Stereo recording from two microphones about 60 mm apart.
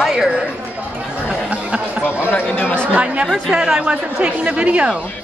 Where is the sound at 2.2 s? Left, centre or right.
Left.